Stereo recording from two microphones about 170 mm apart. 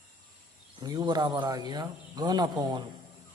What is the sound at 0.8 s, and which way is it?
Speech, 25° right (ahead or behind).